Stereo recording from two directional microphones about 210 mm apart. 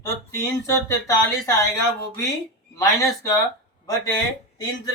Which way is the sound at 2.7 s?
15° left (ahead or behind).